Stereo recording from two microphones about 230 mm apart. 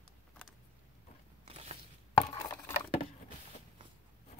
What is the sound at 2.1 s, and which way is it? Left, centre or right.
Chopping, left.